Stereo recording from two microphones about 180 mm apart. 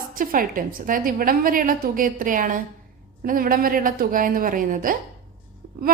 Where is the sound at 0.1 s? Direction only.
50° right (ahead or behind).